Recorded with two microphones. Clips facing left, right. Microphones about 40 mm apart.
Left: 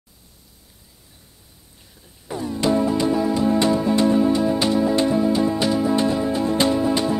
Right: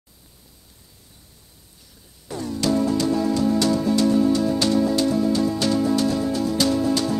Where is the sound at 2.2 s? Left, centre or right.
Centre.